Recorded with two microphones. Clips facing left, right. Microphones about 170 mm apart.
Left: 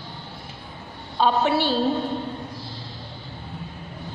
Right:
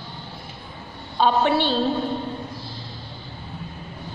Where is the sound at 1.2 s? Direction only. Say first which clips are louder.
Right 1 dB; 5° left (ahead or behind).